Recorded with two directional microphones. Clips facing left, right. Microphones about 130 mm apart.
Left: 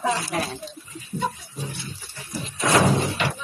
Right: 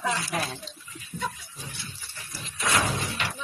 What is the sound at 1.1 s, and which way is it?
Music, 30° left (ahead or behind).